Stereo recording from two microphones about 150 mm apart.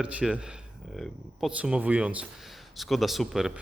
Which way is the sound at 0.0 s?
10° right (ahead or behind).